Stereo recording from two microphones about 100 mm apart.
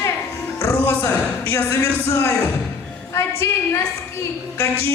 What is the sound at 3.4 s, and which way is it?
Speech, 25° left (ahead or behind).